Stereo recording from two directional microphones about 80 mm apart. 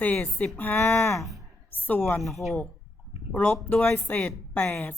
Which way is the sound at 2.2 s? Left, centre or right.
Centre.